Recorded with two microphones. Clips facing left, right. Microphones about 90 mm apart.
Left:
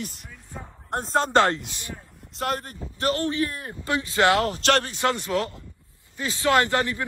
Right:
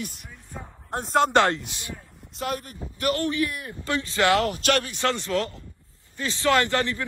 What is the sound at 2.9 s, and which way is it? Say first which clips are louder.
A man's voice: even; 25° left (ahead or behind).